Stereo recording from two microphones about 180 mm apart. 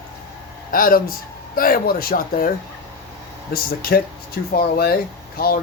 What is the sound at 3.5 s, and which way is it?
Speech, 55° left (ahead or behind).